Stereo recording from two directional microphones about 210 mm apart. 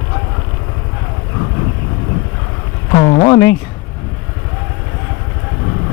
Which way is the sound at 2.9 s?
25° left (ahead or behind).